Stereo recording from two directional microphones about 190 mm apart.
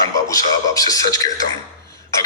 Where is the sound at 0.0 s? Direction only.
20° left (ahead or behind).